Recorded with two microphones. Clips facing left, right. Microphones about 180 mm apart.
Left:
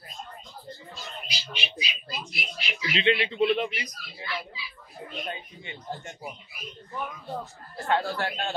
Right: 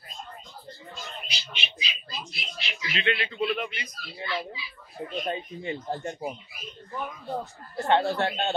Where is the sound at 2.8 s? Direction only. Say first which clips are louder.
Left 4 dB; 30° left (ahead or behind).